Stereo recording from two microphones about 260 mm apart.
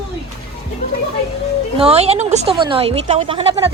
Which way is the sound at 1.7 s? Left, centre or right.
Right.